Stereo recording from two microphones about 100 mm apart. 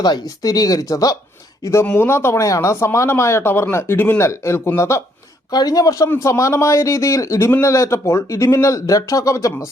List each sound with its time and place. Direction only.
0.0 s a man's voice: 40° left (ahead or behind)
5.5 s a man's voice: 40° left (ahead or behind)